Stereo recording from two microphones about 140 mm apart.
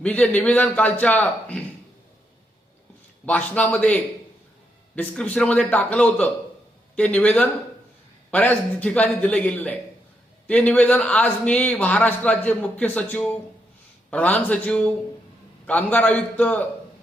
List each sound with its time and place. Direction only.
0.0 s a man's voice: 10° left (ahead or behind)
3.2 s a man's voice: 10° left (ahead or behind)